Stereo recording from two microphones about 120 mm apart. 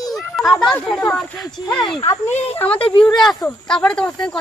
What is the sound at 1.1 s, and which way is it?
Speech, 5° left (ahead or behind).